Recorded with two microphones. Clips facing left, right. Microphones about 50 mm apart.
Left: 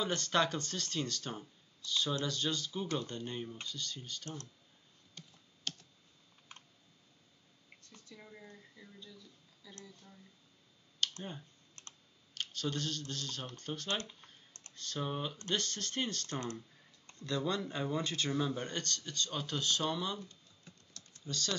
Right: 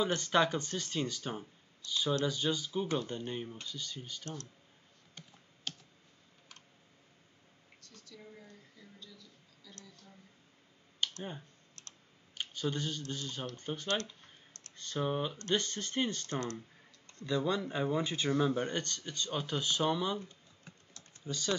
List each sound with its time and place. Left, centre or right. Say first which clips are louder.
0.0 s speech: right 3 dB; centre
5.7 s computer keyboard: even; centre
7.8 s a sound: right 2 dB; left
11.0 s clicking: right 1 dB; centre
11.8 s computer keyboard: left 1 dB; left
12.4 s speech: right 2 dB; centre
13.8 s speech: right 4 dB; left
14.8 s speech: right 4 dB; centre
20.9 s typing: right 2 dB; right